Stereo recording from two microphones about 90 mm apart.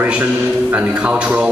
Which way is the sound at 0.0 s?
15° right (ahead or behind).